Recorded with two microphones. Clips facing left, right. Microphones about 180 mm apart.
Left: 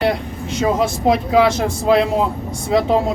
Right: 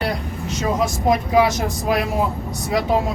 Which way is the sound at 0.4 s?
30° left (ahead or behind).